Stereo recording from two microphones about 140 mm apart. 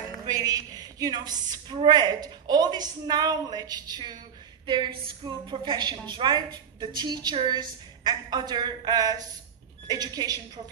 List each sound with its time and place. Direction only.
0.5 s a woman's voice: 25° right (ahead or behind)